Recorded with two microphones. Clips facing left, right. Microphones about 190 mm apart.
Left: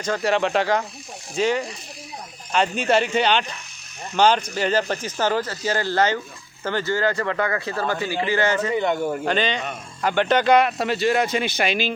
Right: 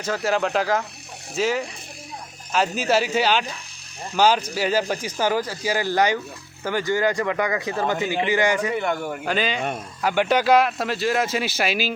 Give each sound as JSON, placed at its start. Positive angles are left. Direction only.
{"t": 0.0, "sound": "speech", "side_deg": -5}
{"t": 8.7, "sound": "a man's voice", "side_deg": 20}
{"t": 9.0, "sound": "speech", "side_deg": -5}